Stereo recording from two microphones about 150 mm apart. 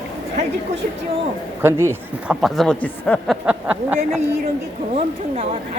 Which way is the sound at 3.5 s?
10° right (ahead or behind).